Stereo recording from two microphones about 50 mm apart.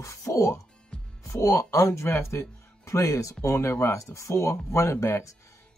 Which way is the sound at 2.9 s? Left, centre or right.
Left.